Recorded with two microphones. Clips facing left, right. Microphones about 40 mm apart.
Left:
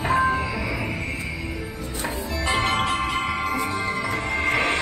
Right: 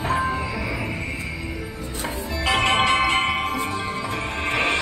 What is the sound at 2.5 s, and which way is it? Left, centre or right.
Music, right.